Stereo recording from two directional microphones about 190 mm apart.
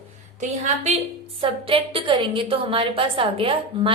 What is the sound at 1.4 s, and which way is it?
A woman's voice, 30° right (ahead or behind).